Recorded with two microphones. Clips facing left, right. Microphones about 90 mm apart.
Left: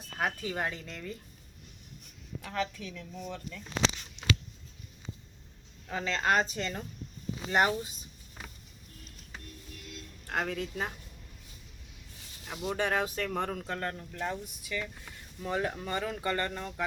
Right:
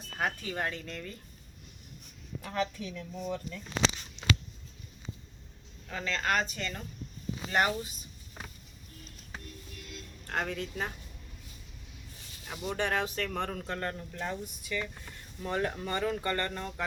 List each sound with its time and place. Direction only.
0.2 s speech: 10° left (ahead or behind)
2.4 s speech: 5° right (ahead or behind)
5.9 s a woman's voice: 15° left (ahead or behind)
10.2 s speech: 5° left (ahead or behind)
12.5 s speech: 5° left (ahead or behind)